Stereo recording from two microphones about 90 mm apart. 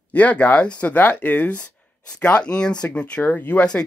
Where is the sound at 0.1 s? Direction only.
15° left (ahead or behind).